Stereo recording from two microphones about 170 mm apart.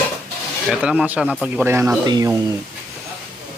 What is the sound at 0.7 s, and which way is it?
Speech, 5° right (ahead or behind).